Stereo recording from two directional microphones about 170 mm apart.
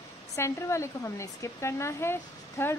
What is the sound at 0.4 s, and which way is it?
Speech, 15° left (ahead or behind).